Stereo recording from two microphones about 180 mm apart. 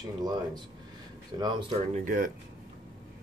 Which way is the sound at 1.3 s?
25° right (ahead or behind).